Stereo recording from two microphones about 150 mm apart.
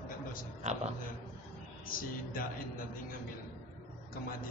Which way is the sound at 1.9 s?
70° left (ahead or behind).